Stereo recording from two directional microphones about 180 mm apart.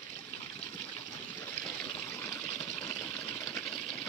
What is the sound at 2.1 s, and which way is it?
Water, 15° left (ahead or behind).